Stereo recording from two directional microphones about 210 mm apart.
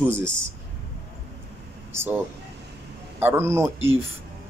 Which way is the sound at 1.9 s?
10° right (ahead or behind).